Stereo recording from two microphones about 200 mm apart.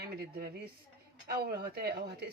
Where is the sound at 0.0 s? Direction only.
55° right (ahead or behind).